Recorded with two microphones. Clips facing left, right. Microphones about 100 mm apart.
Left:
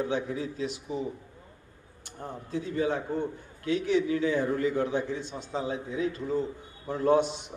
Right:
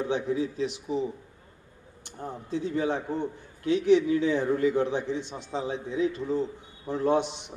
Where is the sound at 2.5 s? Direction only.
25° right (ahead or behind).